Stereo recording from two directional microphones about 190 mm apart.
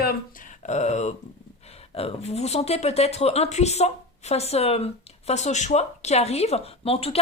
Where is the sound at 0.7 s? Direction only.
35° left (ahead or behind).